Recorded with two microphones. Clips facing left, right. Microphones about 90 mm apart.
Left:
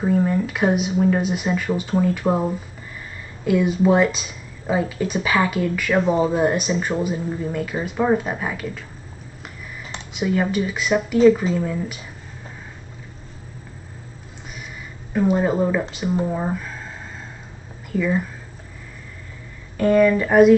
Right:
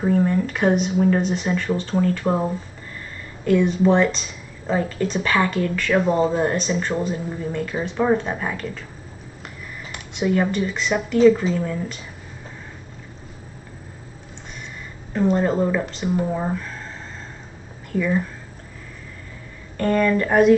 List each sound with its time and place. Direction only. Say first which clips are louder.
0.0 s a woman's voice: even; 5° left (ahead or behind)
10.1 s speech: right 1 dB; centre (ahead or behind)
15.1 s a woman's voice: even; 5° left (ahead or behind)
17.9 s speech: even; 5° left (ahead or behind)
19.8 s speech: left 3 dB; 5° left (ahead or behind)